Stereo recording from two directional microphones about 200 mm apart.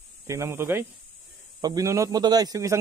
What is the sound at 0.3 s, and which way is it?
A man's voice, 15° right (ahead or behind).